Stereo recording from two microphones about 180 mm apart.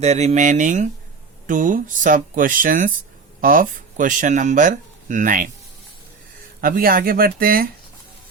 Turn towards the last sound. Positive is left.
turn(degrees=-55)  # may be behind; listen again after turning